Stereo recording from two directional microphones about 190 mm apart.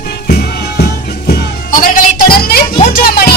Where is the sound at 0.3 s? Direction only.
55° left (ahead or behind).